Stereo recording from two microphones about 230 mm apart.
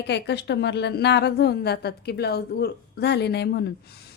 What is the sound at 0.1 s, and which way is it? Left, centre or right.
A woman's voice, left.